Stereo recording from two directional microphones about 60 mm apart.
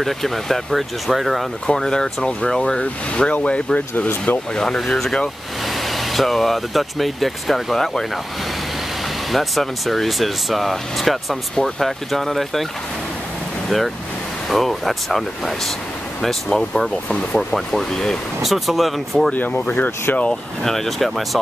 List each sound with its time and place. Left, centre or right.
0.0 s speech: centre
1.7 s speech: centre
4.6 s speech: centre
9.3 s speech: centre
14.5 s speech: centre
19.3 s speech: left
20.2 s speech: centre